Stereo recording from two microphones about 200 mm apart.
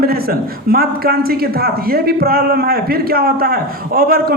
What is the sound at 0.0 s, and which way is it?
A man's voice, 50° right (ahead or behind).